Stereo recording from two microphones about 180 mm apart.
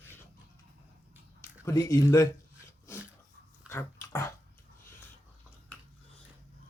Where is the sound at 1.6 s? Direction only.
15° left (ahead or behind).